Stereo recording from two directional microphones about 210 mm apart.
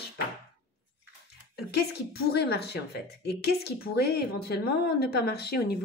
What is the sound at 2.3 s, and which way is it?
Speech, 50° left (ahead or behind).